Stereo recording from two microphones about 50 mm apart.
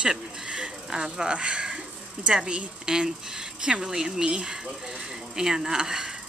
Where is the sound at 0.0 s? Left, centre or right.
Centre.